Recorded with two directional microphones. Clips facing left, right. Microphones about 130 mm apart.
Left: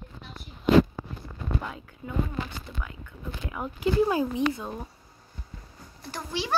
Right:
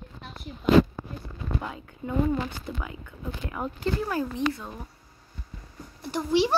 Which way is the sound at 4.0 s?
15° left (ahead or behind).